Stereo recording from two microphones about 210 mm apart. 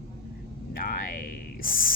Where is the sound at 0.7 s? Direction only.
40° left (ahead or behind).